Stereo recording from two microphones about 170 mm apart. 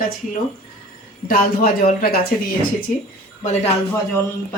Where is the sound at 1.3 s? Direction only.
60° left (ahead or behind).